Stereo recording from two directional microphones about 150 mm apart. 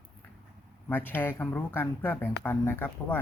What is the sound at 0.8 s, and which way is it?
Speech, 15° left (ahead or behind).